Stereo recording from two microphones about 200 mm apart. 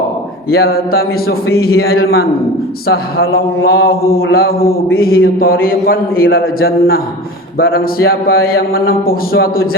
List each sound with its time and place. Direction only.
0.5 s speech: 50° left (ahead or behind)